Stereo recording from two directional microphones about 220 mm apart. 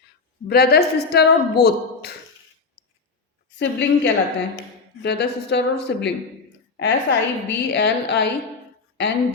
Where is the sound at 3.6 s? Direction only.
55° left (ahead or behind).